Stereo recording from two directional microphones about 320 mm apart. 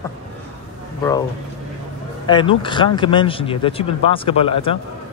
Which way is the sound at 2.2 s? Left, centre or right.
Centre.